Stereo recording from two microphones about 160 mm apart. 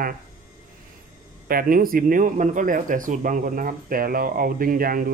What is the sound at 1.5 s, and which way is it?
Speech, 65° right (ahead or behind).